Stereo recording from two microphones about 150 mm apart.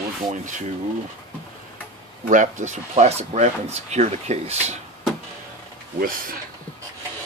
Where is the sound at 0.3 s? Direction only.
55° right (ahead or behind).